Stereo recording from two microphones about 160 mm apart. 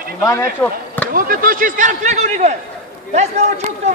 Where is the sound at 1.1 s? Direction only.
60° right (ahead or behind).